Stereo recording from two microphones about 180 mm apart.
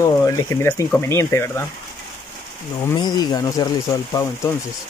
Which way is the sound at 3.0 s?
25° left (ahead or behind).